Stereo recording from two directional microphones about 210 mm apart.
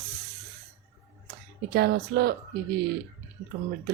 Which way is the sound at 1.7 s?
50° right (ahead or behind).